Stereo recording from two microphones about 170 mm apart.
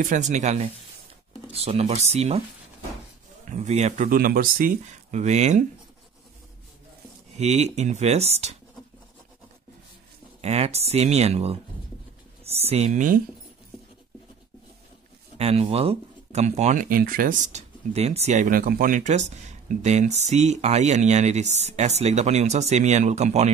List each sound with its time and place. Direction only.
0.0 s speech: 45° right (ahead or behind)
3.4 s speech: 40° right (ahead or behind)
7.3 s speech: 40° right (ahead or behind)
10.4 s speech: 40° right (ahead or behind)
15.3 s speech: 35° right (ahead or behind)